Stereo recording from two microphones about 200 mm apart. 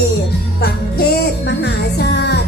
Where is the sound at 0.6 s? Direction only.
50° left (ahead or behind).